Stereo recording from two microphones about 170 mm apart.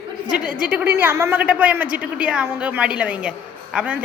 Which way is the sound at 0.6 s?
5° right (ahead or behind).